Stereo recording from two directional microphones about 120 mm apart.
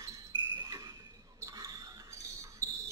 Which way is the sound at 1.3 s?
30° right (ahead or behind).